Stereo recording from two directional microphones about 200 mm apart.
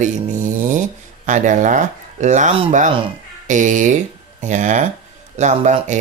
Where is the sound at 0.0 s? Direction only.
40° right (ahead or behind).